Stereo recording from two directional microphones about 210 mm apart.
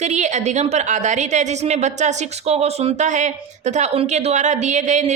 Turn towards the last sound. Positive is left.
turn(degrees=-35)  # may be behind; listen again after turning